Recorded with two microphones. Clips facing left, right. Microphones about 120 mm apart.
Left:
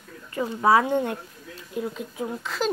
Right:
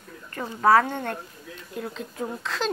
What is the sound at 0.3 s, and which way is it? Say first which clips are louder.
Speech: even; 10° left (ahead or behind).